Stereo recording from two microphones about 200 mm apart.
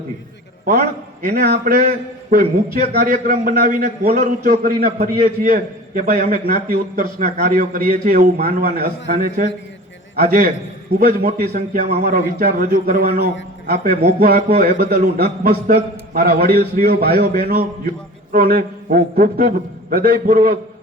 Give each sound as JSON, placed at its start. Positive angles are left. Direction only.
{"t": 0.6, "sound": "a man's voice", "side_deg": -50}